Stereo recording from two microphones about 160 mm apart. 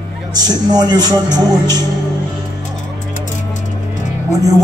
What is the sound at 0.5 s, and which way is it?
Speech, 25° right (ahead or behind).